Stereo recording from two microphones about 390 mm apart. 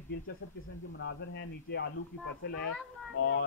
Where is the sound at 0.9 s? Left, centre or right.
Left.